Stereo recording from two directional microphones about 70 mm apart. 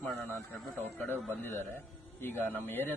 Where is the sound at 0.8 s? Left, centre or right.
Left.